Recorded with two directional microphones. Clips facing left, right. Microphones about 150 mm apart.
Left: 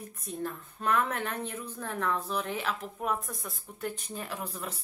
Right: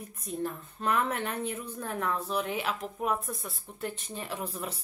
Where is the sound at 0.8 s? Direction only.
10° right (ahead or behind).